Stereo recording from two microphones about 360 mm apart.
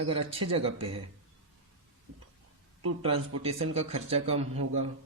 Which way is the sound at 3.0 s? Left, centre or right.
Centre.